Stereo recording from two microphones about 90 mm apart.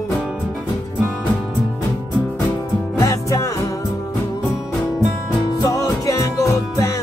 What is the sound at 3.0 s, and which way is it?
Music, 35° left (ahead or behind).